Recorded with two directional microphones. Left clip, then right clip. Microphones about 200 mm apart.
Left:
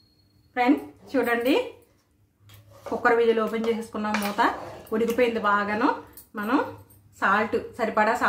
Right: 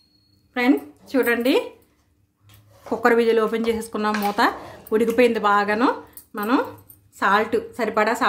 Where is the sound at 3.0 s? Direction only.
50° right (ahead or behind).